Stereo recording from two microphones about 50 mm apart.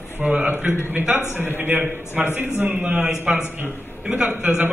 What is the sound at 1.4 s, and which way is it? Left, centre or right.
A man's voice, right.